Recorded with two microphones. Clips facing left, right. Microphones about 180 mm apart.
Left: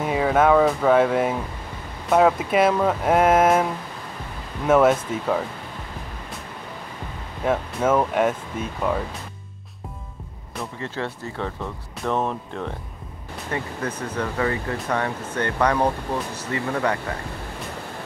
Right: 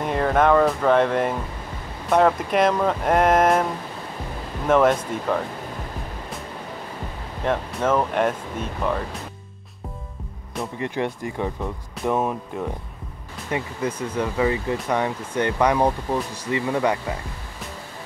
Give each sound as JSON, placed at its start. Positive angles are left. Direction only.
{"t": 0.0, "sound": "speech", "side_deg": 5}
{"t": 4.6, "sound": "speech", "side_deg": 5}
{"t": 7.4, "sound": "speech", "side_deg": 5}
{"t": 10.8, "sound": "speech", "side_deg": -15}